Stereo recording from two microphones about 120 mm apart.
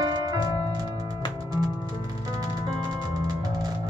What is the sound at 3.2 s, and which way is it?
Music, 30° right (ahead or behind).